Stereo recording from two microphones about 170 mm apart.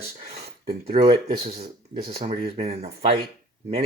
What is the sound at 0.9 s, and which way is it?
Speech, 40° right (ahead or behind).